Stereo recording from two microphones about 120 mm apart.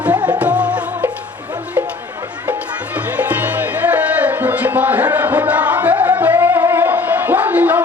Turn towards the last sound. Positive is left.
turn(degrees=-15)  # may be behind; listen again after turning